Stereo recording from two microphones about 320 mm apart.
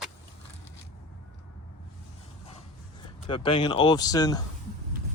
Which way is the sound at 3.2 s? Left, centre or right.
Centre.